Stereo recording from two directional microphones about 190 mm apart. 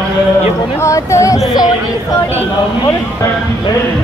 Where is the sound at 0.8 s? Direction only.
15° left (ahead or behind).